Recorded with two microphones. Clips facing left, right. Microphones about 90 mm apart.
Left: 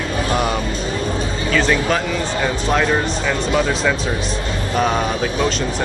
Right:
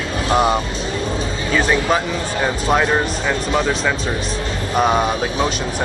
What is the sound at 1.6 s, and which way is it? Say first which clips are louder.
Speech: right 1 dB; 15° right (ahead or behind).